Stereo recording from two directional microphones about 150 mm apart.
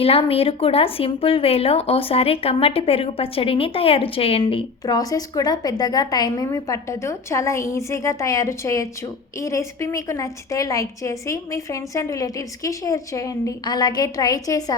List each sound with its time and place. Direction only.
0.0 s a woman's voice: 40° left (ahead or behind); by 14.6 s 25° left (ahead or behind)